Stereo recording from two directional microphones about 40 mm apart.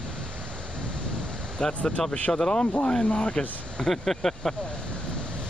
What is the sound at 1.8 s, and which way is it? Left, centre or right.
Speech, left.